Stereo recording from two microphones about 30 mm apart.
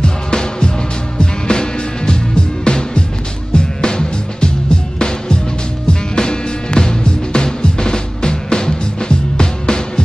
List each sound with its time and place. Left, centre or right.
0.0 s music: left